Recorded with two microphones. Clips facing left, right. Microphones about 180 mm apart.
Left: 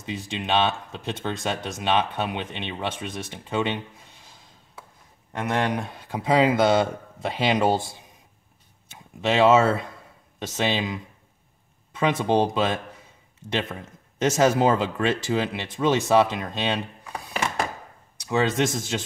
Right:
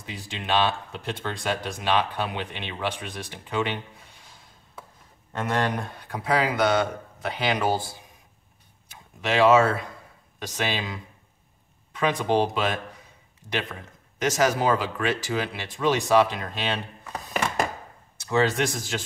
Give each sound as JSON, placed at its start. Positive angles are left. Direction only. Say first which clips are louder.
{"t": 0.1, "sound": "speech", "louder": "left 2 dB", "side_deg": 20}
{"t": 5.3, "sound": "speech", "louder": "left 1 dB", "side_deg": 15}
{"t": 18.3, "sound": "speech", "louder": "left 1 dB", "side_deg": 20}